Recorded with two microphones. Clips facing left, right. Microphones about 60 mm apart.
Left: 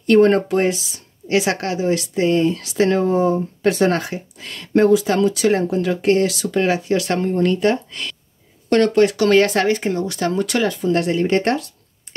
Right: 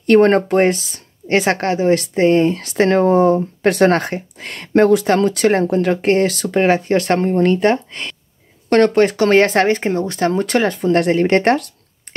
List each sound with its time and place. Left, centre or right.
0.0 s speech: right